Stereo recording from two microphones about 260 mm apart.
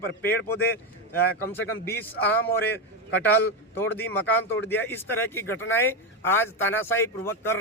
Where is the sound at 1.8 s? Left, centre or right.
Centre.